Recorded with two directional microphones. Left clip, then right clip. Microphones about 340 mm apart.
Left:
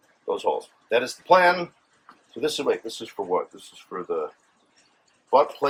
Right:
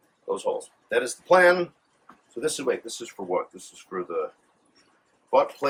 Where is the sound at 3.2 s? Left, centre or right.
Left.